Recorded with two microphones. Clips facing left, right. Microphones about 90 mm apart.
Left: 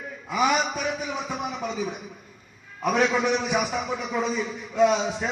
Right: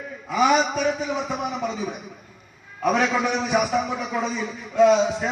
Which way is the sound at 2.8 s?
Centre (ahead or behind).